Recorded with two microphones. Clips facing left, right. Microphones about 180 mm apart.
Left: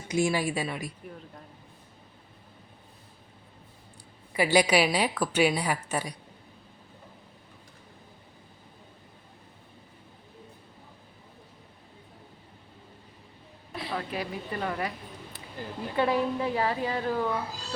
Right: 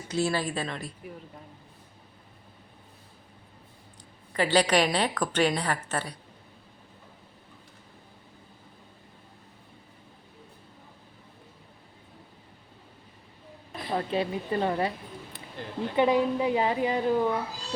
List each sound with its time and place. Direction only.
0.1 s a woman's voice: 15° left (ahead or behind)
4.3 s a woman's voice: 10° left (ahead or behind)
13.9 s a woman's voice: 25° right (ahead or behind)
15.6 s a woman's voice: 5° left (ahead or behind)
16.0 s a woman's voice: 15° right (ahead or behind)